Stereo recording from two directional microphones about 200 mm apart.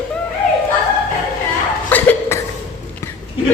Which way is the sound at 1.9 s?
10° left (ahead or behind).